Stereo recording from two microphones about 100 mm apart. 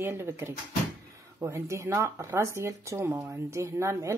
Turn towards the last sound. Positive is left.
turn(degrees=-30)  # may be behind; listen again after turning